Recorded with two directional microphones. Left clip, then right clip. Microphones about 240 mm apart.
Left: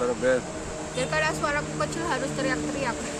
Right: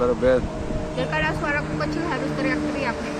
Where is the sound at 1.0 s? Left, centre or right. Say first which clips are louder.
Right 1 dB; centre.